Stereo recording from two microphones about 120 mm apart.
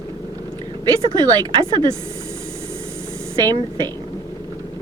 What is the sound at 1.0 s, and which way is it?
Speech, 35° right (ahead or behind).